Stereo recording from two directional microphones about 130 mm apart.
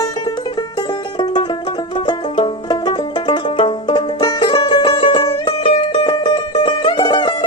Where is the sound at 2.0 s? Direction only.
35° left (ahead or behind).